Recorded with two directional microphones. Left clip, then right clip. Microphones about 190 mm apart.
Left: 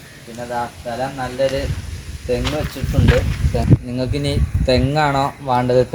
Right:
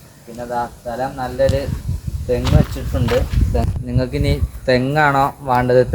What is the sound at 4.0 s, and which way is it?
Speech, centre (ahead or behind).